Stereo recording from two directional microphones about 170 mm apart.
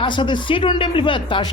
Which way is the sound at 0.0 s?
30° left (ahead or behind).